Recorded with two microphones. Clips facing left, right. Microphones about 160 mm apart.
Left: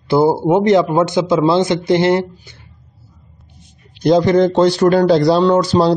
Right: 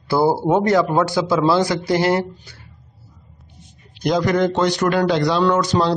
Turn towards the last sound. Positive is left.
turn(degrees=30)  # may be behind; listen again after turning